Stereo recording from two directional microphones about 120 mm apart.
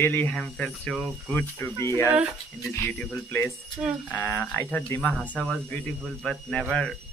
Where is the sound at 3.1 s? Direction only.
20° left (ahead or behind).